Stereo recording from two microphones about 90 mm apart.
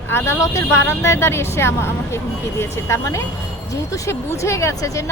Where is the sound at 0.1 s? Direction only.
35° left (ahead or behind).